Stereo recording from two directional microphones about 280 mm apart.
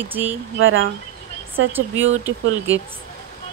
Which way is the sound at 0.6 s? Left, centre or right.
Right.